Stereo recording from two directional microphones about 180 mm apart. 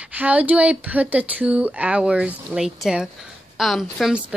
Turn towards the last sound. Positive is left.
turn(degrees=-5)  # may be behind; listen again after turning